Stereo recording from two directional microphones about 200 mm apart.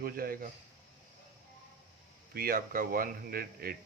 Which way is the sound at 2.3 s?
45° right (ahead or behind).